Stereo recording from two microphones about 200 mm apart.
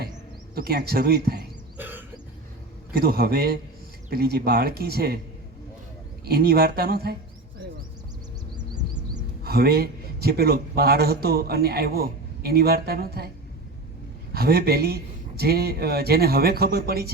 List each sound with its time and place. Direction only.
0.5 s a man's voice: 50° right (ahead or behind)
1.8 s a sound: 10° right (ahead or behind)
2.9 s a man's voice: 50° right (ahead or behind)
6.2 s a man's voice: 50° right (ahead or behind)
9.4 s a man's voice: 50° right (ahead or behind)
14.3 s a man's voice: 50° right (ahead or behind)